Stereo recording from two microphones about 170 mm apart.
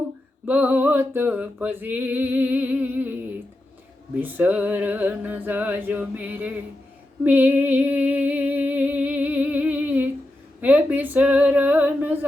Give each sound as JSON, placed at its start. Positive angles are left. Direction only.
{"t": 0.4, "sound": "music", "side_deg": -10}
{"t": 4.2, "sound": "music", "side_deg": -10}
{"t": 7.3, "sound": "a sound", "side_deg": -10}
{"t": 10.6, "sound": "music", "side_deg": -10}